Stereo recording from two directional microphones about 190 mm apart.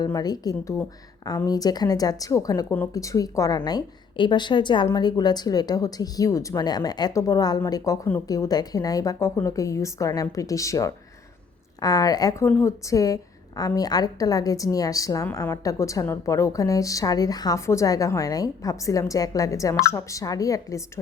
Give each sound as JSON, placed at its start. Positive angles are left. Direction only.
{"t": 0.0, "sound": "a woman's voice", "side_deg": 20}